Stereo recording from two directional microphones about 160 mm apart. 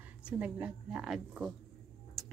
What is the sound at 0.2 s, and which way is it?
A woman's voice, 5° right (ahead or behind).